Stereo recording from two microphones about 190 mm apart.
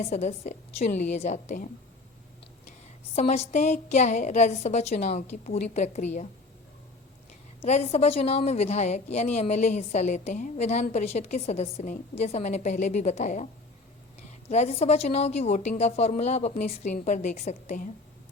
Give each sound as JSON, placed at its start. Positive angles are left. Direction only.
{"t": 0.0, "sound": "a woman's voice", "side_deg": 35}
{"t": 3.2, "sound": "a woman's voice", "side_deg": 35}
{"t": 7.6, "sound": "a woman's voice", "side_deg": 35}